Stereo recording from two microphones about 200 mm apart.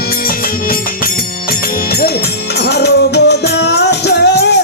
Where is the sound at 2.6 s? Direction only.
55° left (ahead or behind).